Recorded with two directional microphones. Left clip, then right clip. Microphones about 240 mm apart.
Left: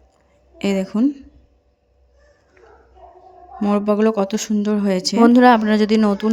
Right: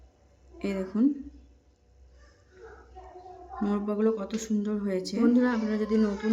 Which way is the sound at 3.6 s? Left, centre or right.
Left.